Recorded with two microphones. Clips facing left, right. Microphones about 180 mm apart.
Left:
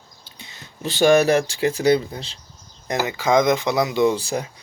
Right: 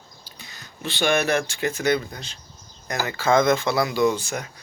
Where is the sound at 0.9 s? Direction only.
40° left (ahead or behind).